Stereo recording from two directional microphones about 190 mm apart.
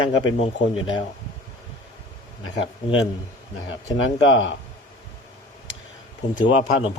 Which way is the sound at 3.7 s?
85° left.